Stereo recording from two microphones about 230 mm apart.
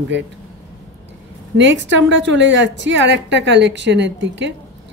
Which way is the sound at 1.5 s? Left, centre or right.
Right.